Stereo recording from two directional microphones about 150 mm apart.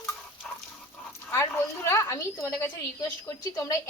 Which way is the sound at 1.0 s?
15° left (ahead or behind).